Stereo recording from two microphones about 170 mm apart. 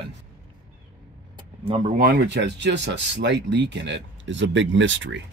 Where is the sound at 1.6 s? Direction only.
35° right (ahead or behind).